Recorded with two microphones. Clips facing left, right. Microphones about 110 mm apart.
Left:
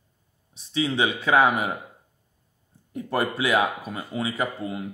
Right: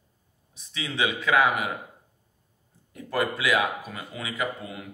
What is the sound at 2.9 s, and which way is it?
Speech, 30° left (ahead or behind).